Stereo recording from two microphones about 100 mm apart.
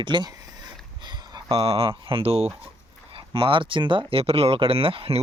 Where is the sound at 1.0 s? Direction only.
45° right (ahead or behind).